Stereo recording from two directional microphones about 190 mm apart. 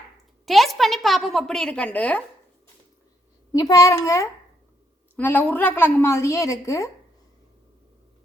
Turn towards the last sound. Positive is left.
turn(degrees=15)  # may be behind; listen again after turning